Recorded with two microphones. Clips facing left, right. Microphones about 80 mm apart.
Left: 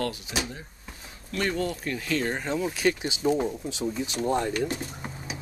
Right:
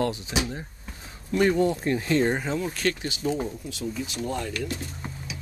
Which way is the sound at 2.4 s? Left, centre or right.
Centre.